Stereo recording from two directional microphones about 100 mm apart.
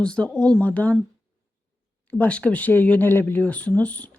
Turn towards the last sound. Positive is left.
turn(degrees=15)  # may be behind; listen again after turning